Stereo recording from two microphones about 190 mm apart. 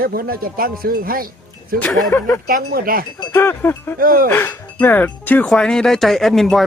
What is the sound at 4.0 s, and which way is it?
Speech, 50° right (ahead or behind).